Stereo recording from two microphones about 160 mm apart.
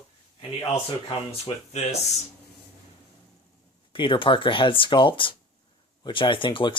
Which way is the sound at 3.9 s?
30° left (ahead or behind).